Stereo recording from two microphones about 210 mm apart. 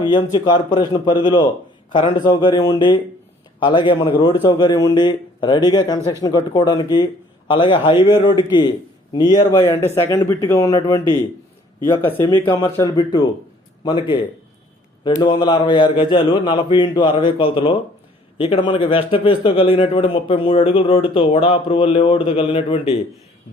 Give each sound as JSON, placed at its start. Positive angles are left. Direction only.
{"t": 0.0, "sound": "a man's voice", "side_deg": 20}
{"t": 15.2, "sound": "a man's voice", "side_deg": 20}